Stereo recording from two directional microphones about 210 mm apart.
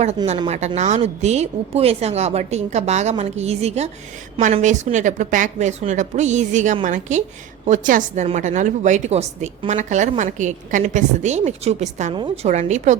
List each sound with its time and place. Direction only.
0.3 s a woman's voice: 30° right (ahead or behind)